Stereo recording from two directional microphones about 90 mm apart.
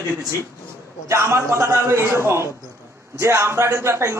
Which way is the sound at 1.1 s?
30° right (ahead or behind).